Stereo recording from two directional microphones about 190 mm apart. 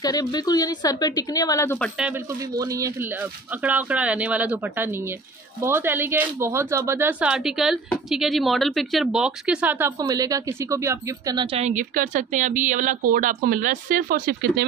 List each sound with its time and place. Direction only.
0.0 s a woman's voice: 20° left (ahead or behind)
2.5 s a woman's voice: 20° right (ahead or behind)
11.5 s a woman's voice: 40° right (ahead or behind)